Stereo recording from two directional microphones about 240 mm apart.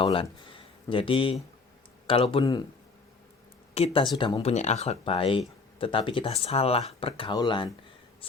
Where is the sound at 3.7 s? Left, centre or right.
Left.